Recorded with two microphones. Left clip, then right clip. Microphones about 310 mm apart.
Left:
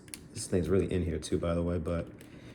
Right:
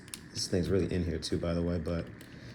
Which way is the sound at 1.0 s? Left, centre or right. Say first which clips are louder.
Left 1 dB; left.